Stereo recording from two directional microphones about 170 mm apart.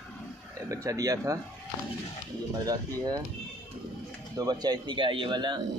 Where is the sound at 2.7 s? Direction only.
20° right (ahead or behind).